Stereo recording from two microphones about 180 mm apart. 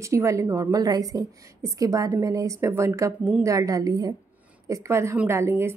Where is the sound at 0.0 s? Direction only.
15° right (ahead or behind).